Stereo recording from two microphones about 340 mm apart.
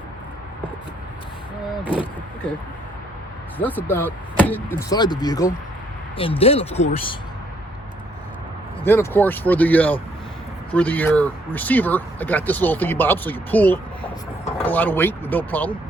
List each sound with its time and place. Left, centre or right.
1.8 s speech: centre
3.6 s speech: centre
8.8 s speech: centre